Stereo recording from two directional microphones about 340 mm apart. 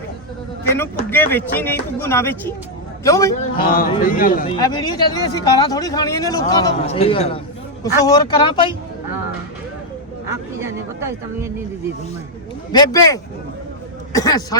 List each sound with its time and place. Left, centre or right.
0.8 s speech: centre
3.6 s speech: left
4.5 s speech: centre
10.2 s speech: centre
12.7 s speech: centre